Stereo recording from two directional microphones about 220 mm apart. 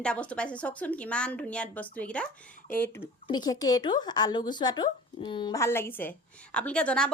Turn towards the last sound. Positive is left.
turn(degrees=5)  # may be behind; listen again after turning